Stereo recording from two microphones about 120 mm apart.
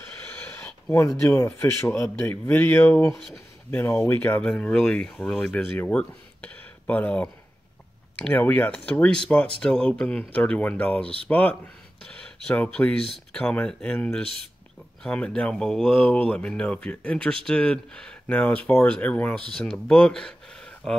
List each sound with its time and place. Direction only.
0.9 s speech: 25° left (ahead or behind)
3.1 s speech: centre (ahead or behind)
3.7 s speech: 20° left (ahead or behind)